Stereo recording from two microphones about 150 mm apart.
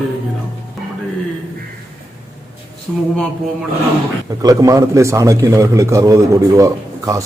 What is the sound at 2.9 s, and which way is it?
Speech, 5° left (ahead or behind).